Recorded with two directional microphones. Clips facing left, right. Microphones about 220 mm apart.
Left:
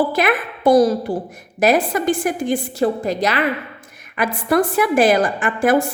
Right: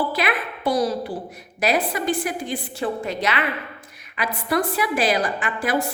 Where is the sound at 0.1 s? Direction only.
50° left (ahead or behind).